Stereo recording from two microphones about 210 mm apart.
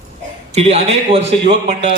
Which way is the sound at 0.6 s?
30° right (ahead or behind).